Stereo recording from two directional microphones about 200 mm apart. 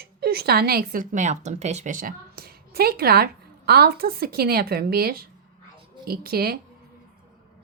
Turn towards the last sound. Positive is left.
turn(degrees=-50)  # may be behind; listen again after turning